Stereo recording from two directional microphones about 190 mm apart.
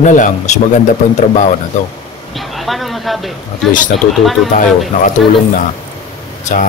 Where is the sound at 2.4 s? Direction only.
Centre (ahead or behind).